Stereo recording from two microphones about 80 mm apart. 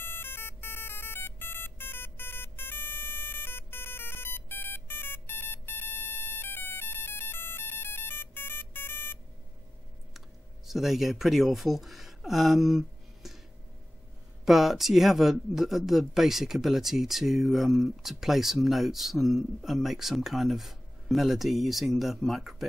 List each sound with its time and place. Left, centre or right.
0.0 s ringtone: left
10.7 s speech: centre
14.4 s speech: centre